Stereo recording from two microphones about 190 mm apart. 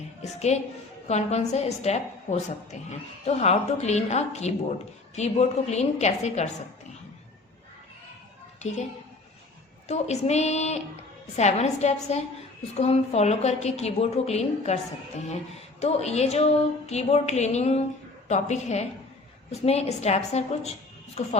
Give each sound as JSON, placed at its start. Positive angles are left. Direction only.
{"t": 0.2, "sound": "a woman's voice", "side_deg": 35}
{"t": 9.9, "sound": "a woman's voice", "side_deg": 35}
{"t": 15.8, "sound": "a woman's voice", "side_deg": 35}